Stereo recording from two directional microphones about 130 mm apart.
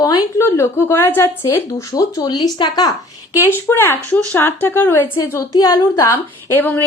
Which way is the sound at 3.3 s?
20° left (ahead or behind).